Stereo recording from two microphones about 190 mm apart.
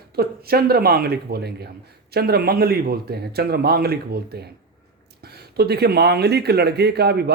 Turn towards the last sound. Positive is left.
turn(degrees=-60)  # may be behind; listen again after turning